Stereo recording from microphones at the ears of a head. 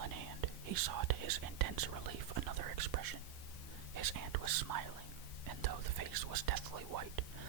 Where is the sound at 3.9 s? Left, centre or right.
Right.